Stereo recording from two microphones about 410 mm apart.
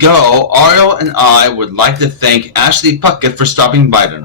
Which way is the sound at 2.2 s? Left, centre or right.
Right.